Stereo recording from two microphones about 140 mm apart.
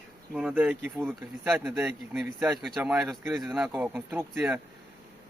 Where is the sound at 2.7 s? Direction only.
5° right (ahead or behind).